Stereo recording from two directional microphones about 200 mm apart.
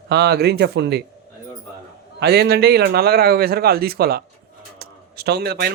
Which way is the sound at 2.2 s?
50° right (ahead or behind).